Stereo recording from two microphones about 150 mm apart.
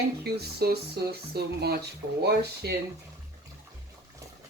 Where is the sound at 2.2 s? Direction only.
90° right.